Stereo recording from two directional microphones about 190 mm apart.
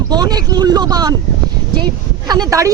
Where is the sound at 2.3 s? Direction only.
20° right (ahead or behind).